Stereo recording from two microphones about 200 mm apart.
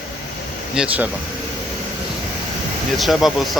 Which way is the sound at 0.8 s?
5° right (ahead or behind).